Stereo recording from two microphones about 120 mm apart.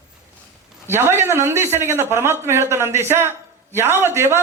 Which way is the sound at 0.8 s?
20° right (ahead or behind).